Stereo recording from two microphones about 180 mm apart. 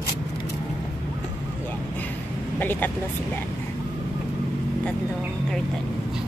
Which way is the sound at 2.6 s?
10° left (ahead or behind).